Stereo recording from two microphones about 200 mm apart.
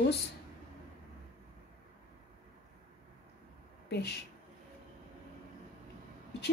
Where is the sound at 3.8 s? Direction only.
55° left (ahead or behind).